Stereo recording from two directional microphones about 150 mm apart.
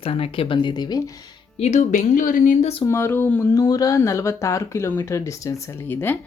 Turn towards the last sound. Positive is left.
turn(degrees=15)  # may be behind; listen again after turning